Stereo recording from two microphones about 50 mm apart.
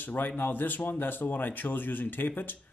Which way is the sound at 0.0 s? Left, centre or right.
Left.